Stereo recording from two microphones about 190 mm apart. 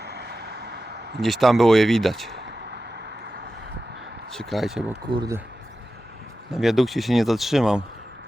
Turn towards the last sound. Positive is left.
turn(degrees=-5)  # may be behind; listen again after turning